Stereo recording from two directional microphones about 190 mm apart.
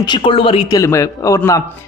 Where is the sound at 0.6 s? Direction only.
15° left (ahead or behind).